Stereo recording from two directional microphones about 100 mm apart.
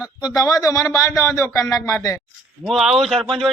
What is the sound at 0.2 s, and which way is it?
Speech, 40° left (ahead or behind).